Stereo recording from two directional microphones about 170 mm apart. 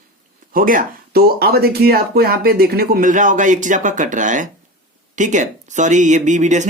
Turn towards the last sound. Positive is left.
turn(degrees=-45)  # may be behind; listen again after turning